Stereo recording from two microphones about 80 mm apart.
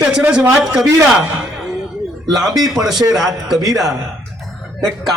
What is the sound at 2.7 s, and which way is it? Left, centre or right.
Speech, centre.